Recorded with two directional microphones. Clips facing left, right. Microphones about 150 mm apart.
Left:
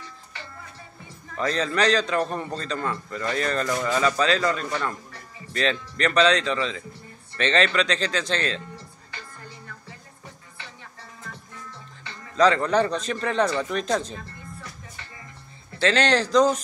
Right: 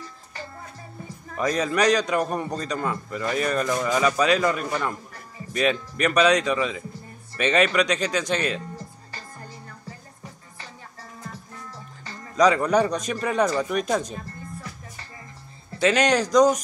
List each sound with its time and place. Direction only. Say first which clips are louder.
0.0 s music: right 3 dB; 40° right (ahead or behind)
1.3 s a man's voice: right 2 dB; 15° right (ahead or behind)
8.7 s music: right 3 dB; 40° right (ahead or behind)
12.4 s a man's voice: right 1 dB; 15° right (ahead or behind)
15.8 s a man's voice: right 1 dB; 15° right (ahead or behind)